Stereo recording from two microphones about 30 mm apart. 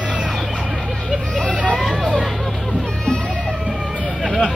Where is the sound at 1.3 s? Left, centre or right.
Left.